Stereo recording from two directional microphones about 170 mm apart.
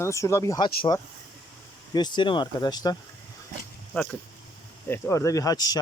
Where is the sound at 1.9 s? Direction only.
25° left (ahead or behind).